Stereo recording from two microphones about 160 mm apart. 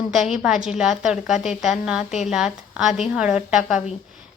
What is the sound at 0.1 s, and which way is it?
A woman's voice, centre (ahead or behind).